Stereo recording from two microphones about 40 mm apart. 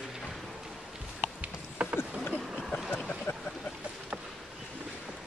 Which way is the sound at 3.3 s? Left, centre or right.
Left.